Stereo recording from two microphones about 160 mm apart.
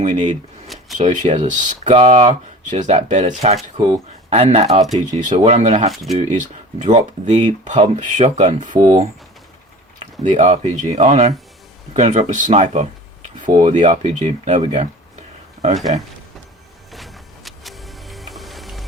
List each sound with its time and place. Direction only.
0.0 s speech: 45° right (ahead or behind)
10.2 s speech: 40° right (ahead or behind)
15.9 s speech: 45° right (ahead or behind)
16.9 s music: centre (ahead or behind)